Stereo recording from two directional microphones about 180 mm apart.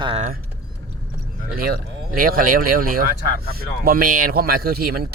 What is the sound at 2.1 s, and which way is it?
Speech, 50° right (ahead or behind).